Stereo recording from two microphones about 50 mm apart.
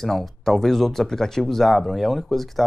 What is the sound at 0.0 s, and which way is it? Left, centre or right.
Speech, centre.